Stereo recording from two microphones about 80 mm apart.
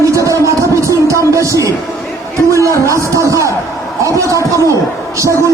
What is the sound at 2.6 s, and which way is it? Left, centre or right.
A man's voice, right.